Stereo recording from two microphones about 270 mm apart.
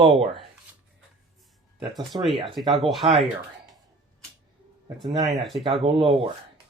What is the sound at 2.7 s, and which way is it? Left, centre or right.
Speech, centre.